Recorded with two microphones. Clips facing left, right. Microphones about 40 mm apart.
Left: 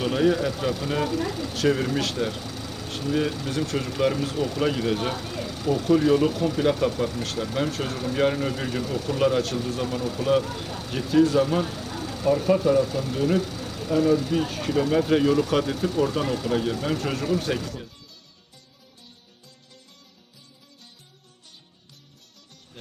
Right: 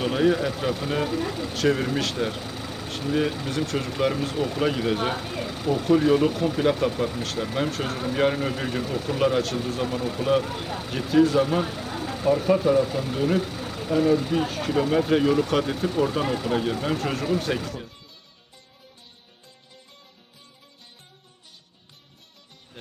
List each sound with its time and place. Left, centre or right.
0.0 s speech: centre